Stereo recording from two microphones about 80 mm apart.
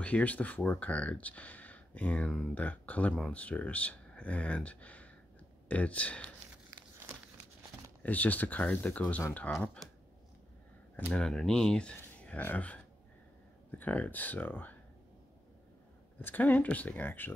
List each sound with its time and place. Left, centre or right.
0.0 s speech: centre
6.7 s a sound: right
8.0 s speech: centre
11.1 s speech: centre; by 14.8 s left
16.2 s speech: left